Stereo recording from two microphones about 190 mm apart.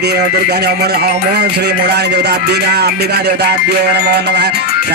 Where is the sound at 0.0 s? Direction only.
60° right (ahead or behind).